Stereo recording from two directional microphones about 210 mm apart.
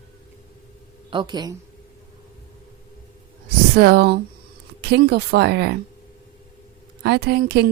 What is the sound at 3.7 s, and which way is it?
Speech, 50° right (ahead or behind).